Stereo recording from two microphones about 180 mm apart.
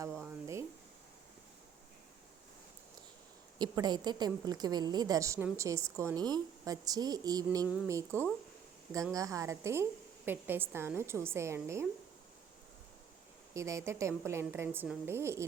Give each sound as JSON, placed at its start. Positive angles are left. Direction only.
{"t": 0.1, "sound": "a sound", "side_deg": -5}
{"t": 3.6, "sound": "a woman's voice", "side_deg": -25}
{"t": 13.5, "sound": "a woman's voice", "side_deg": -15}